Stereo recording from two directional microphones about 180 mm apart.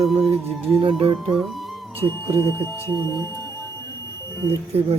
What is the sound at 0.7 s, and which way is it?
Speech, 30° right (ahead or behind).